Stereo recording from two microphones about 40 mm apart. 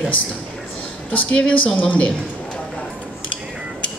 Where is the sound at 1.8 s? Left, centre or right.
Left.